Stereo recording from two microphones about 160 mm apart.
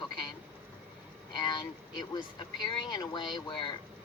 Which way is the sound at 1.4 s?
25° left (ahead or behind).